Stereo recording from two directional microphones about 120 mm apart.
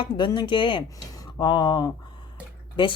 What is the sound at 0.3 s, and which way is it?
Speech, 45° left (ahead or behind).